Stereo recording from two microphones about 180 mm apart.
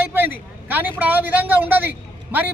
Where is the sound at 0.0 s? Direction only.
10° right (ahead or behind).